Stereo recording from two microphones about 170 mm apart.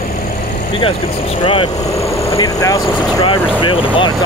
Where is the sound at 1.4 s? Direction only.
30° left (ahead or behind).